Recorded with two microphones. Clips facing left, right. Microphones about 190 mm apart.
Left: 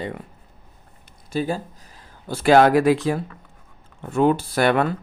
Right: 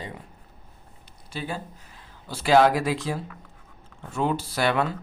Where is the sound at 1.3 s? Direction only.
40° left (ahead or behind).